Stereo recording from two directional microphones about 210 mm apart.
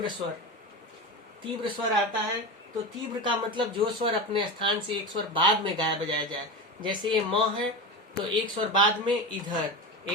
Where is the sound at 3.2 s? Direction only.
20° right (ahead or behind).